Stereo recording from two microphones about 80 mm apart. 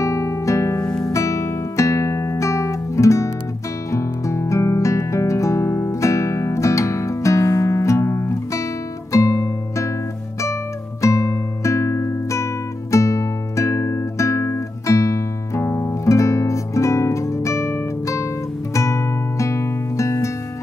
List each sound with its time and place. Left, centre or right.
0.0 s music: left
0.8 s music: centre
1.1 s music: left
12.9 s guitar: left